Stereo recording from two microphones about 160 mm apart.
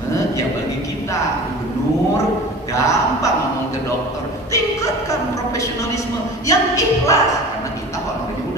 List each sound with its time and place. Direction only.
2.7 s a man's voice: 20° left (ahead or behind)
6.4 s speech: 20° left (ahead or behind)